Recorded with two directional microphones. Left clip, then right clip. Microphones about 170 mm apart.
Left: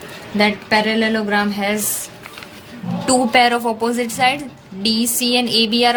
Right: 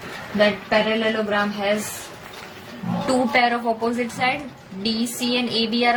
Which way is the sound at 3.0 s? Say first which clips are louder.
Left 5 dB; 45° left (ahead or behind).